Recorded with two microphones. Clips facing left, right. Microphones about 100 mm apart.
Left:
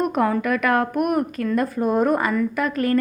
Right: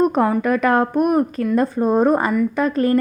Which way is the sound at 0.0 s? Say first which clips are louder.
Right 4 dB; 30° right (ahead or behind).